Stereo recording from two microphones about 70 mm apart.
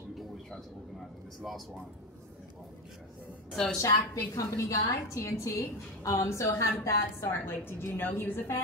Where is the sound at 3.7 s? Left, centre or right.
Left.